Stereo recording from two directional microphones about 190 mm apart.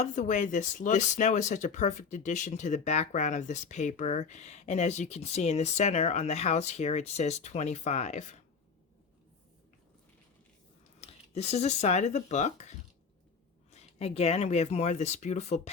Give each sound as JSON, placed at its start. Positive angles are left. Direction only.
{"t": 0.0, "sound": "speech", "side_deg": 40}
{"t": 11.0, "sound": "speech", "side_deg": 35}